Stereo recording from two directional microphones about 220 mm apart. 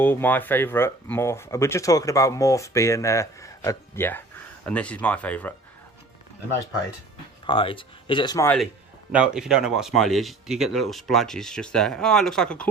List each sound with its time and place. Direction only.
0.0 s speech: 10° left (ahead or behind)
7.4 s speech: 25° left (ahead or behind)
9.1 s speech: 5° right (ahead or behind)